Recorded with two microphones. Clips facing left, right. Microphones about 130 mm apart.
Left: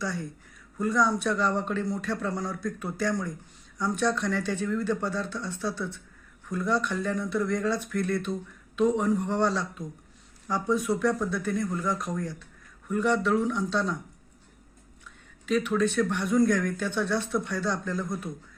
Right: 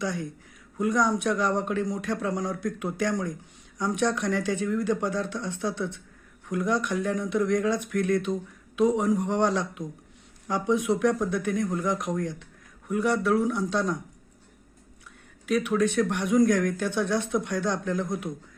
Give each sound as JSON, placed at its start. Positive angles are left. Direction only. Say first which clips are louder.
{"t": 0.0, "sound": "speech", "louder": "right 2 dB", "side_deg": -15}
{"t": 15.4, "sound": "speech", "louder": "right 1 dB", "side_deg": -10}